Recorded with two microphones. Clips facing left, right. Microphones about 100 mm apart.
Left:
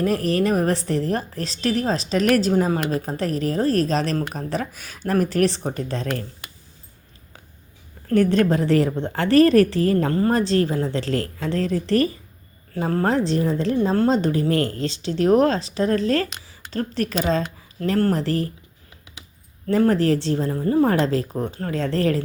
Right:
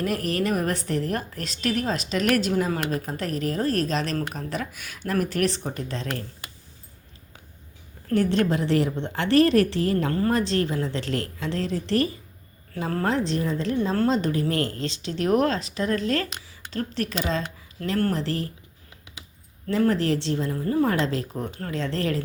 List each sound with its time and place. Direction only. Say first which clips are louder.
0.0 s a woman's voice: left 5 dB; 35° left (ahead or behind)
8.1 s a woman's voice: left 4 dB; 50° left (ahead or behind)
10.1 s a woman's voice: left 4 dB; 30° left (ahead or behind)
12.7 s a woman's voice: left 4 dB; 25° left (ahead or behind)
14.6 s speech: left 4 dB; 30° right (ahead or behind)
15.0 s a woman's voice: left 5 dB; 30° left (ahead or behind)
19.9 s a woman's voice: left 4 dB; 40° left (ahead or behind)
21.7 s a woman's voice: left 5 dB; 45° left (ahead or behind)